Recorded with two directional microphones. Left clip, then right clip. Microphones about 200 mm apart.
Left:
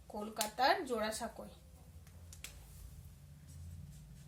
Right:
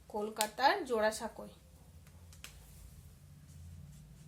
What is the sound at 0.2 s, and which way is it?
Speech, 35° right (ahead or behind).